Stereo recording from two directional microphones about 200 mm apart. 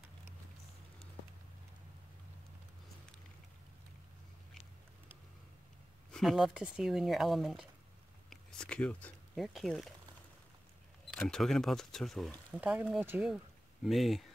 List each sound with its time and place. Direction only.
6.1 s speech: centre (ahead or behind)
11.1 s speech: 5° left (ahead or behind)